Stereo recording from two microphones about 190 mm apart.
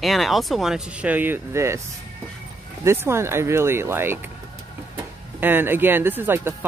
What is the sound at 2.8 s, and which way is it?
Speech, 15° right (ahead or behind).